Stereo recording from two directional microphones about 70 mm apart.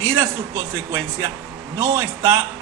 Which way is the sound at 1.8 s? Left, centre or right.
Right.